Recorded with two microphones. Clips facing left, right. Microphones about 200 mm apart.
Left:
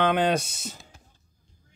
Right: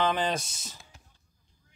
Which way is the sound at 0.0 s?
60° left (ahead or behind).